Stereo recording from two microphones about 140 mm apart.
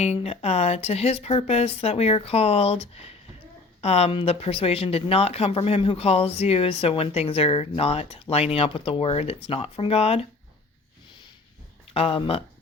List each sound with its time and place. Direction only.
0.0 s speech: 50° left (ahead or behind)
11.9 s speech: 40° left (ahead or behind)